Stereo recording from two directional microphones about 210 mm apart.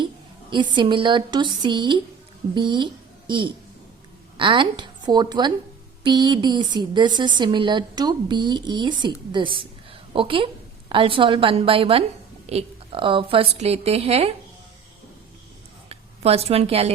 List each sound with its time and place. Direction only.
0.5 s a woman's voice: 20° right (ahead or behind)
15.9 s a woman's voice: 30° right (ahead or behind)